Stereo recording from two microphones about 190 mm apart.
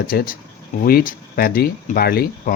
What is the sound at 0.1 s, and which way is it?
Speech, 50° left (ahead or behind).